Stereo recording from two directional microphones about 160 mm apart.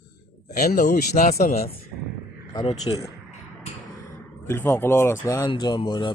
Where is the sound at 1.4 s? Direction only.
40° left (ahead or behind).